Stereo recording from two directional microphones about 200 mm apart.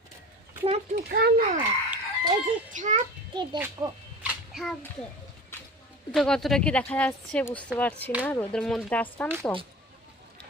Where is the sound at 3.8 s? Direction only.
15° right (ahead or behind).